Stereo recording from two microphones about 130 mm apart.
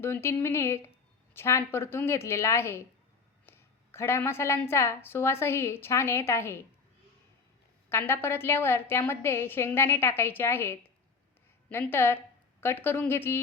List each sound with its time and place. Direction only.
0.0 s a woman's voice: 20° left (ahead or behind)
7.9 s a woman's voice: 20° left (ahead or behind)